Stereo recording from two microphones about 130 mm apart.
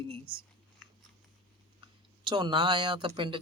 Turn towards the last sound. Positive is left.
turn(degrees=-40)  # may be behind; listen again after turning